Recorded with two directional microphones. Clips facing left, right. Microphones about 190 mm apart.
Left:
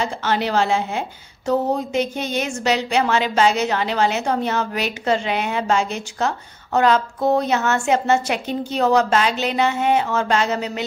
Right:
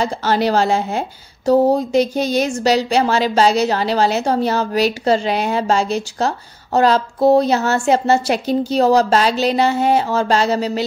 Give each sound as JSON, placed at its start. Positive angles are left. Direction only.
{"t": 0.0, "sound": "speech", "side_deg": -40}